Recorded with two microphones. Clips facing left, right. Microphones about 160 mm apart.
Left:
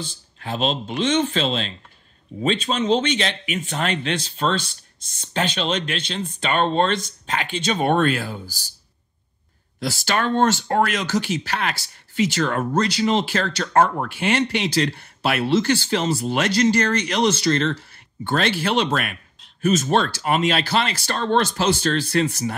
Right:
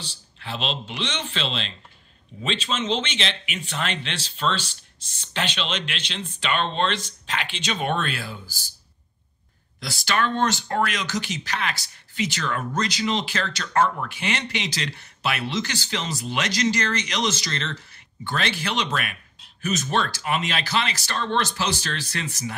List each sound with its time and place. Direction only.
0.1 s speech: 45° left (ahead or behind)
5.2 s speech: 45° left (ahead or behind)
9.8 s speech: 50° left (ahead or behind)